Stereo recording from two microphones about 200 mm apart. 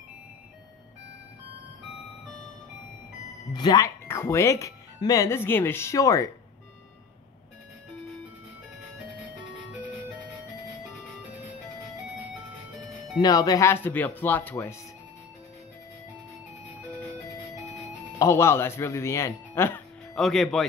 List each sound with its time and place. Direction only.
3.5 s speech: 20° left (ahead or behind)
13.2 s speech: 20° left (ahead or behind)
18.2 s speech: 15° left (ahead or behind)
20.2 s speech: centre (ahead or behind)